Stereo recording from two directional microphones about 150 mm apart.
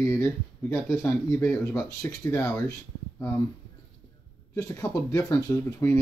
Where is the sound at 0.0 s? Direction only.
20° left (ahead or behind).